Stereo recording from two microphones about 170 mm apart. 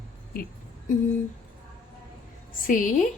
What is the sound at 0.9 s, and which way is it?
Speech, 50° left (ahead or behind).